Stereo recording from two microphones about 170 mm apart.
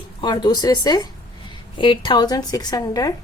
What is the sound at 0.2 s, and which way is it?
A woman's voice, 25° left (ahead or behind).